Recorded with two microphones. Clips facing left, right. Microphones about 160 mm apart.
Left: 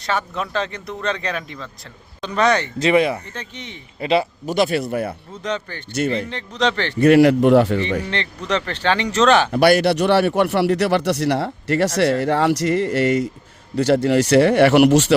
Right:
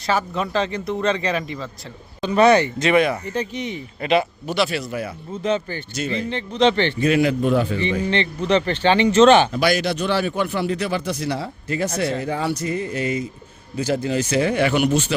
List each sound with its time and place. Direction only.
0.0 s speech: centre (ahead or behind)
2.7 s speech: 30° left (ahead or behind)
3.3 s speech: 10° right (ahead or behind)
4.0 s speech: 30° left (ahead or behind)
4.5 s speech: 50° left (ahead or behind)
5.4 s speech: 5° right (ahead or behind)
7.0 s a man's voice: 70° left (ahead or behind)
8.7 s speech: centre (ahead or behind)
9.5 s a man's voice: 60° left (ahead or behind); by 15.1 s 85° left